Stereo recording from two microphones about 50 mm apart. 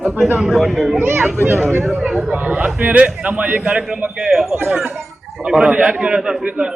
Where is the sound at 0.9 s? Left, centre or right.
Right.